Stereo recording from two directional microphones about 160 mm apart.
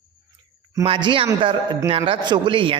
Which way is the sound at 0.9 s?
35° right (ahead or behind).